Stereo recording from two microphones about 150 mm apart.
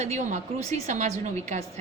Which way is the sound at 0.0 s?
50° right (ahead or behind).